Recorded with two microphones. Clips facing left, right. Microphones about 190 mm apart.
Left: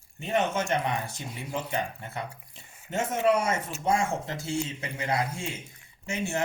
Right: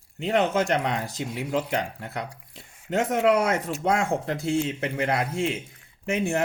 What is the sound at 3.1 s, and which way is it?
Speech, 65° right (ahead or behind).